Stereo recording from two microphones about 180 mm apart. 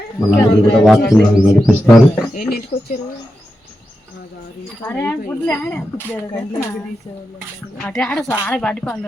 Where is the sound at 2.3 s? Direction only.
55° left (ahead or behind).